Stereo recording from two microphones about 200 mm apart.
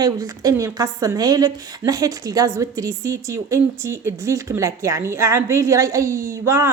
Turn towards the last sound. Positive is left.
turn(degrees=-15)  # may be behind; listen again after turning